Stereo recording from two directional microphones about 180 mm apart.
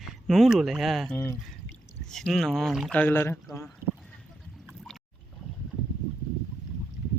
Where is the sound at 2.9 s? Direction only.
10° left (ahead or behind).